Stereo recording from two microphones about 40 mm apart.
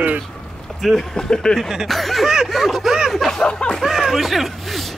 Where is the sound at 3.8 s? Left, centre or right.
Centre.